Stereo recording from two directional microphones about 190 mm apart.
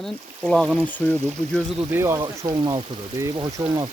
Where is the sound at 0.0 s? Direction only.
Centre (ahead or behind).